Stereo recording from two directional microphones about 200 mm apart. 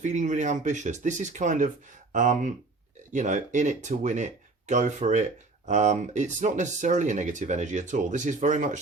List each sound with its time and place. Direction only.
0.0 s speech: 35° right (ahead or behind)